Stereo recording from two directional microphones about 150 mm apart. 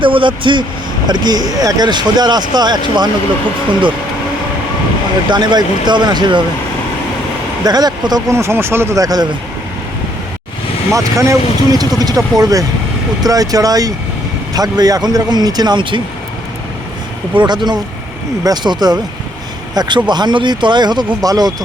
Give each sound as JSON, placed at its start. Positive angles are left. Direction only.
{"t": 0.0, "sound": "speech", "side_deg": -35}
{"t": 5.3, "sound": "speech", "side_deg": -30}
{"t": 7.6, "sound": "speech", "side_deg": -25}
{"t": 10.9, "sound": "speech", "side_deg": -20}
{"t": 17.3, "sound": "speech", "side_deg": -30}